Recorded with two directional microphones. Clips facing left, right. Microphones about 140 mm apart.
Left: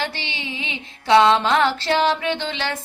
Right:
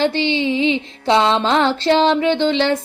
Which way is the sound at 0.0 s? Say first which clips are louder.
Right 12 dB; 25° right (ahead or behind).